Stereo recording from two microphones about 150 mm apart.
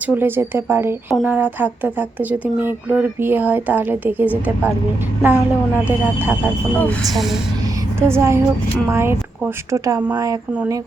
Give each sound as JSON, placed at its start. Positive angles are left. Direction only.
{"t": 0.1, "sound": "speech", "side_deg": -15}
{"t": 6.7, "sound": "speech", "side_deg": 5}
{"t": 7.9, "sound": "speech", "side_deg": -15}